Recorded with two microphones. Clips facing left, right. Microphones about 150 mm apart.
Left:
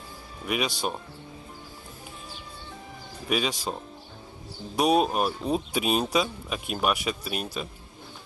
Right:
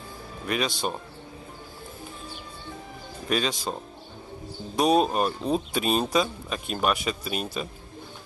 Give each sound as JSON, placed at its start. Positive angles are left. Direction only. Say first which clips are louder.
{"t": 0.5, "sound": "speech", "louder": "right 1 dB", "side_deg": 5}
{"t": 3.3, "sound": "speech", "louder": "right 1 dB", "side_deg": 5}
{"t": 4.7, "sound": "speech", "louder": "right 1 dB", "side_deg": 5}